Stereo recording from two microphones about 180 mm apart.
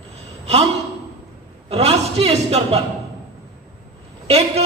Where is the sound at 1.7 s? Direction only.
35° right (ahead or behind).